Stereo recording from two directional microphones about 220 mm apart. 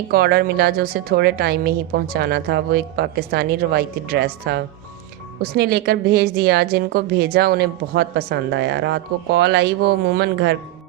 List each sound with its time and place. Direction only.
0.1 s a woman's voice: 45° right (ahead or behind)